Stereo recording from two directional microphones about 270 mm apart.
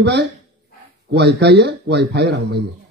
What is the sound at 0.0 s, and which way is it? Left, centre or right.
Speech, right.